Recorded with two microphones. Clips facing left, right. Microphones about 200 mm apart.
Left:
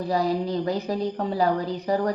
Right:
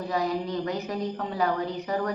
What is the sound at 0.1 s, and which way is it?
Speech, 35° left (ahead or behind).